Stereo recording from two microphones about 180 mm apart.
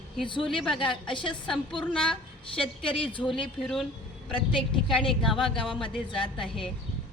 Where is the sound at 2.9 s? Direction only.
30° left (ahead or behind).